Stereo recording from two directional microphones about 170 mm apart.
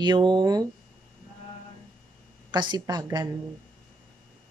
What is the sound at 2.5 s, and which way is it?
Speech, 25° right (ahead or behind).